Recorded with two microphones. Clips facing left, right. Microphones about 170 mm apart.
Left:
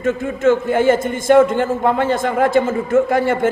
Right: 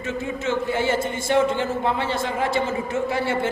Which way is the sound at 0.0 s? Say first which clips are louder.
Left 10 dB; 50° left (ahead or behind).